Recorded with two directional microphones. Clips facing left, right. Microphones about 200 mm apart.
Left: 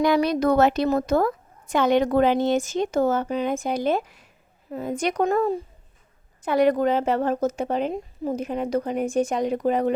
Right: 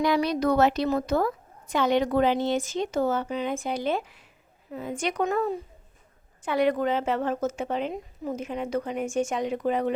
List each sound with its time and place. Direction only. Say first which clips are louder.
0.0 s a woman's voice: left 4 dB; 50° left (ahead or behind)